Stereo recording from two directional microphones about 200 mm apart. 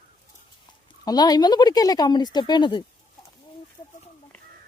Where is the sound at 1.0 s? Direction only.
20° left (ahead or behind).